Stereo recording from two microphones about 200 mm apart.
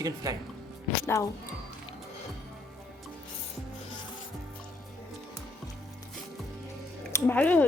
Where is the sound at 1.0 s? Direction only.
15° left (ahead or behind).